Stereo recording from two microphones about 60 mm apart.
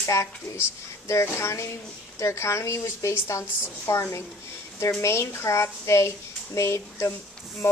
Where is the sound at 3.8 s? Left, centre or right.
Left.